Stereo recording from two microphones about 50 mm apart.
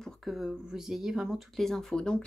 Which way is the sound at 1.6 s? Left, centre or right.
Centre.